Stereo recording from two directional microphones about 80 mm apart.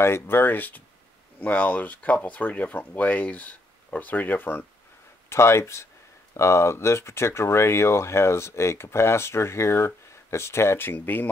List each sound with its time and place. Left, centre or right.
0.0 s speech: left